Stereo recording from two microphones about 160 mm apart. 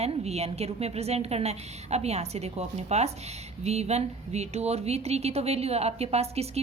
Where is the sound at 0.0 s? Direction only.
40° right (ahead or behind).